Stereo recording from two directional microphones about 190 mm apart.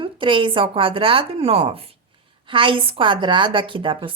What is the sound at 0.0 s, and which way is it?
Speech, 25° right (ahead or behind).